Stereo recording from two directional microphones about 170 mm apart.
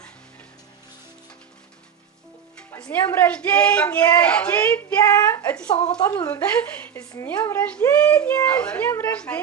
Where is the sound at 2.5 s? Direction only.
5° left (ahead or behind).